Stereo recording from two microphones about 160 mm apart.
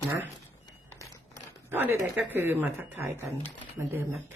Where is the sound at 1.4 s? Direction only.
15° right (ahead or behind).